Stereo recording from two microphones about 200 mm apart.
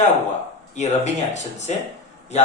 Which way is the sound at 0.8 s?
35° left (ahead or behind).